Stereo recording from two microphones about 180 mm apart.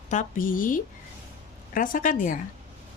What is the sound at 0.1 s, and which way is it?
A woman's voice, 45° left (ahead or behind).